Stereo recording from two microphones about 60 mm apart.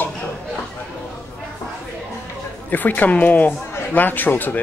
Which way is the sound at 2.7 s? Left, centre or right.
Left.